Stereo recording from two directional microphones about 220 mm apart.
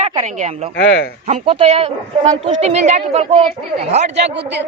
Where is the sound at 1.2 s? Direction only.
30° right (ahead or behind).